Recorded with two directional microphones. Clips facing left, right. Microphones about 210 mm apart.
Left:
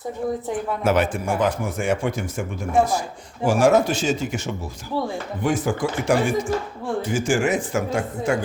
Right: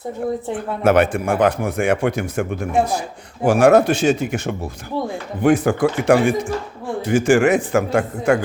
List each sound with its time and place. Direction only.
0.9 s a man's voice: 60° right (ahead or behind)